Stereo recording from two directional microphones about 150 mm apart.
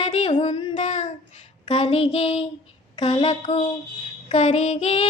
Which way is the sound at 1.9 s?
40° left (ahead or behind).